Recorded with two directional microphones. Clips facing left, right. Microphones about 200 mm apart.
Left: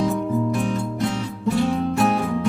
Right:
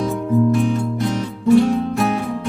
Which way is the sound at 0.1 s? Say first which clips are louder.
Right 5 dB; centre (ahead or behind).